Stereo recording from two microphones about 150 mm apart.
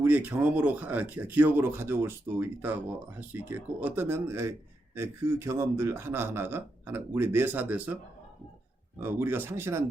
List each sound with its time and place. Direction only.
0.0 s speech: 10° right (ahead or behind)
9.0 s speech: 15° right (ahead or behind)